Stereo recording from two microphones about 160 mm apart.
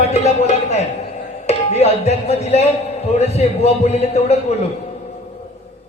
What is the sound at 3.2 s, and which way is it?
A man's voice, 40° left (ahead or behind).